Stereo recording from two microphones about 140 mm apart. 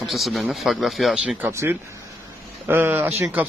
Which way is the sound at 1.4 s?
20° right (ahead or behind).